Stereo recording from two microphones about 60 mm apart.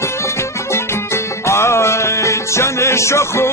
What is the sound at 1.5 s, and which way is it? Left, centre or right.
Music, left.